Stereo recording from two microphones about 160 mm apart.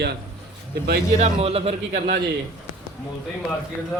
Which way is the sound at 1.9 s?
60° right (ahead or behind).